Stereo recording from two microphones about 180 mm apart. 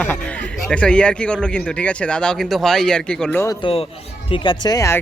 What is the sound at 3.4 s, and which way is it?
Speech, 20° left (ahead or behind).